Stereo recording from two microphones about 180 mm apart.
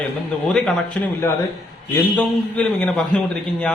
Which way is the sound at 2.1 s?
5° left (ahead or behind).